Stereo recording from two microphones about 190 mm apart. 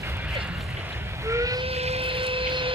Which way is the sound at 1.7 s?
30° right (ahead or behind).